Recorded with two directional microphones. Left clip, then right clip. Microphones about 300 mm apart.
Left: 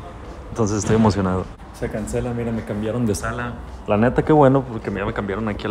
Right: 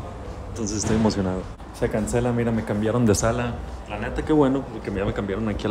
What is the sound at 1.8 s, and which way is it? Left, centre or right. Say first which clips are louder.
Speech: right 2 dB; centre.